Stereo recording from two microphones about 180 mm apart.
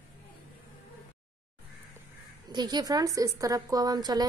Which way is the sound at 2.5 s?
25° right (ahead or behind).